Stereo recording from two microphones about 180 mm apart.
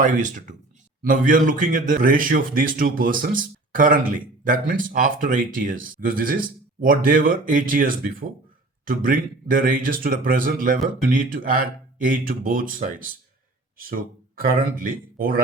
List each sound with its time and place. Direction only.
0.0 s speech: 45° right (ahead or behind)
14.3 s speech: 55° right (ahead or behind)